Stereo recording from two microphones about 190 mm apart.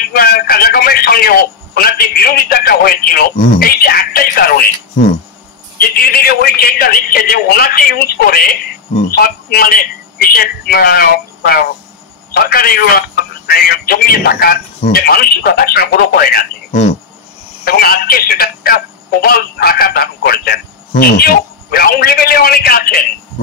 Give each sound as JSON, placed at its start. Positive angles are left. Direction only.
{"t": 0.1, "sound": "a man's voice", "side_deg": 55}
{"t": 5.8, "sound": "a man's voice", "side_deg": 55}
{"t": 17.6, "sound": "a man's voice", "side_deg": 50}